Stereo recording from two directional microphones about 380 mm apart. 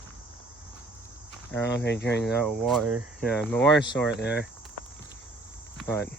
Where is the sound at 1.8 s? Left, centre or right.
Left.